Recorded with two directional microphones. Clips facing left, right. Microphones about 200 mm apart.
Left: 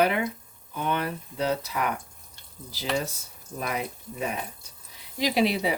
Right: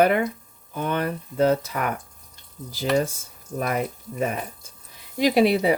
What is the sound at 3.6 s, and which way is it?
Speech, 50° right (ahead or behind).